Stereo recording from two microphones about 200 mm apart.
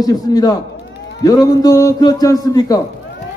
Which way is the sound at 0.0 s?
20° left (ahead or behind).